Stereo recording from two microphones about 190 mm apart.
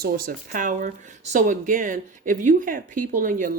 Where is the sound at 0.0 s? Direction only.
50° right (ahead or behind).